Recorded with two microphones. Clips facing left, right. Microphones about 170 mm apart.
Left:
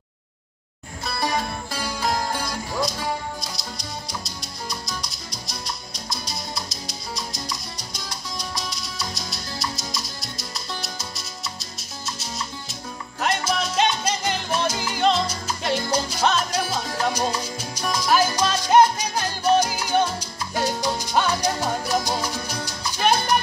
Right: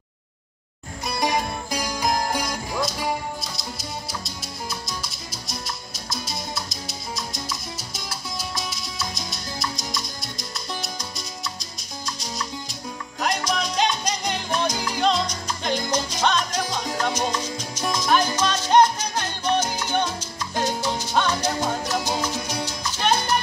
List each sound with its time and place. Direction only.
1.0 s music: 15° right (ahead or behind)
3.3 s music: 5° right (ahead or behind)
13.2 s salsa music: 5° left (ahead or behind)
15.9 s music: 10° left (ahead or behind)
17.0 s salsa music: 10° left (ahead or behind)
17.9 s music: 10° left (ahead or behind)
22.5 s salsa music: 10° right (ahead or behind)
22.9 s salsa music: 10° left (ahead or behind)